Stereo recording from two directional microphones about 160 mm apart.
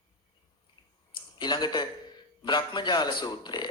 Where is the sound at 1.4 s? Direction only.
30° left (ahead or behind).